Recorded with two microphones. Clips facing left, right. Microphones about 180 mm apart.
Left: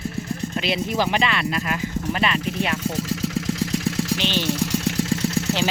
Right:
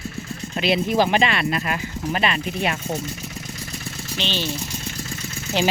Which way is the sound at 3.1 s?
90° left.